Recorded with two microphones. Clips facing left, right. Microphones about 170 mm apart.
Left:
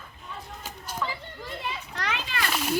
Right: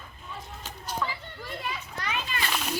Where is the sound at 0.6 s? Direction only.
10° left (ahead or behind).